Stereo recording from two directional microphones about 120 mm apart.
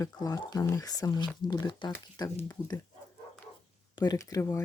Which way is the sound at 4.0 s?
30° left (ahead or behind).